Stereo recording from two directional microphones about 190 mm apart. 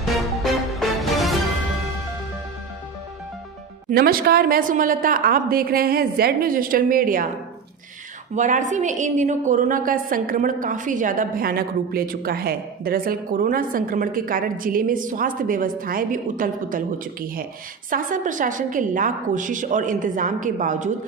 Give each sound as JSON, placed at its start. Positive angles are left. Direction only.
{"t": 0.0, "sound": "music", "side_deg": 0}
{"t": 3.9, "sound": "a woman's voice", "side_deg": -55}
{"t": 8.4, "sound": "a woman's voice", "side_deg": -40}